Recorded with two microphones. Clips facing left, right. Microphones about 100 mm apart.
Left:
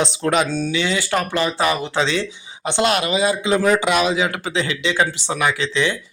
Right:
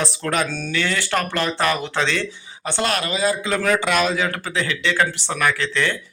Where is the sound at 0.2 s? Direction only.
20° left (ahead or behind).